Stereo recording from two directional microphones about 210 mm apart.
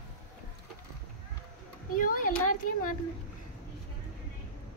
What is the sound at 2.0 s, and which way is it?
A child's voice, 40° left (ahead or behind).